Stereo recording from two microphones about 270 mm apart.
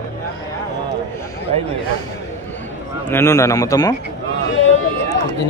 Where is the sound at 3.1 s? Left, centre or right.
Centre.